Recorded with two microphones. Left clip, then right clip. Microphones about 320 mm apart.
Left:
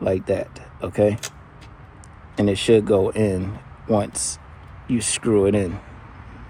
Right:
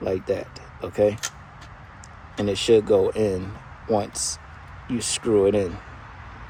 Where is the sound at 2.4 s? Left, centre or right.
Left.